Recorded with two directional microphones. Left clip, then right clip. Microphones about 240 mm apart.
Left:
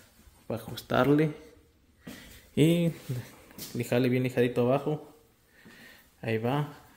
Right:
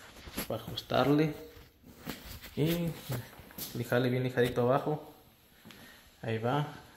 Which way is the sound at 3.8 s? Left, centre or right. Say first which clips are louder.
Left 3 dB; left.